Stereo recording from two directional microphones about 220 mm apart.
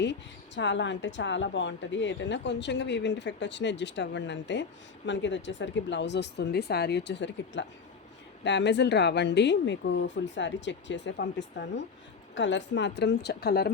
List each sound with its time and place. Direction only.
0.0 s speech: 55° left (ahead or behind)